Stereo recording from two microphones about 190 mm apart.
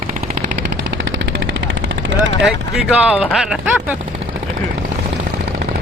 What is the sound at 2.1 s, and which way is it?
Vehicle, 70° right (ahead or behind).